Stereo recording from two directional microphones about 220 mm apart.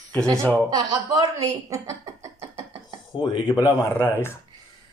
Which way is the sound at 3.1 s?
20° left (ahead or behind).